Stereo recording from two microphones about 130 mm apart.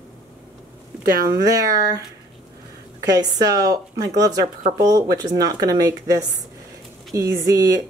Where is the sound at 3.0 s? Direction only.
30° right (ahead or behind).